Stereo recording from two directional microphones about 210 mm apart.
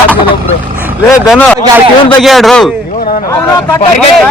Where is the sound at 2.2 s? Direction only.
Centre (ahead or behind).